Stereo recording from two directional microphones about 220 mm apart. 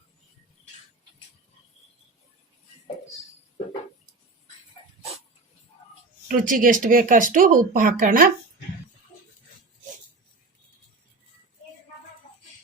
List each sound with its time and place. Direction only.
6.2 s speech: 40° right (ahead or behind)